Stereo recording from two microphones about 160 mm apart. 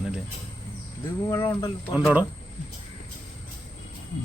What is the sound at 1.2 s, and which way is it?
Speech, 20° left (ahead or behind).